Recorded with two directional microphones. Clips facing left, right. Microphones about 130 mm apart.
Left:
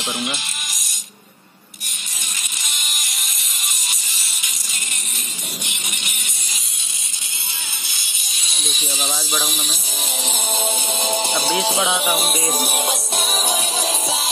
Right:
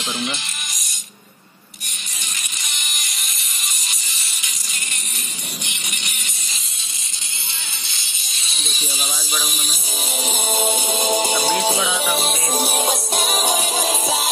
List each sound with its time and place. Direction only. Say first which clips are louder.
0.0 s speech: even; 15° left (ahead or behind)
8.5 s music: left 2 dB; centre (ahead or behind)
10.2 s music: right 3 dB; 10° right (ahead or behind)
11.5 s music: even; 5° left (ahead or behind)
13.4 s music: right 2 dB; 45° right (ahead or behind)